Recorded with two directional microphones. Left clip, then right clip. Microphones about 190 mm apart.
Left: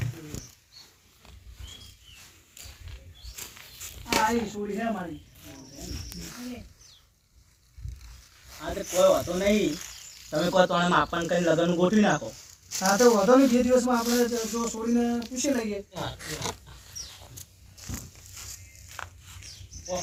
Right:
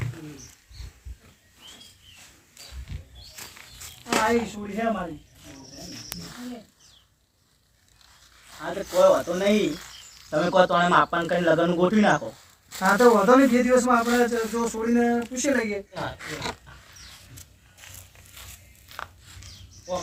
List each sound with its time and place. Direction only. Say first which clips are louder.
4.2 s speech: right 3 dB; 25° right (ahead or behind)
6.3 s bird: right 1 dB; 35° left (ahead or behind)
8.6 s speech: right 3 dB; 5° right (ahead or behind)
12.8 s speech: right 3 dB; 25° right (ahead or behind); by 15.8 s 10° right (ahead or behind)
15.9 s speech: right 3 dB; 5° left (ahead or behind)